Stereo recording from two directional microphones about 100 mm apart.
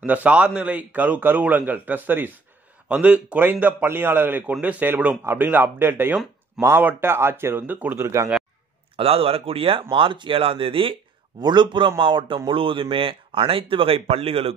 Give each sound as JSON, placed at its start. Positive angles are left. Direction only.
{"t": 0.0, "sound": "a man's voice", "side_deg": -15}
{"t": 8.9, "sound": "speech", "side_deg": -70}
{"t": 11.4, "sound": "a man's voice", "side_deg": -50}